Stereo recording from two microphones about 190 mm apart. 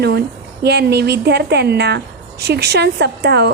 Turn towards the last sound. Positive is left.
turn(degrees=-60)  # may be behind; listen again after turning